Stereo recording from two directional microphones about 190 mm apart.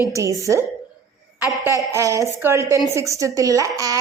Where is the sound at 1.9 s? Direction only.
15° right (ahead or behind).